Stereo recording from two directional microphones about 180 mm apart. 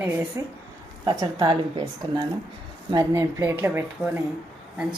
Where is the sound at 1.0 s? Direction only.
20° right (ahead or behind).